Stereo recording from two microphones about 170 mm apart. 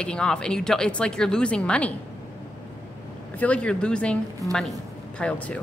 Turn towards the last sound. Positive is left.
turn(degrees=5)  # may be behind; listen again after turning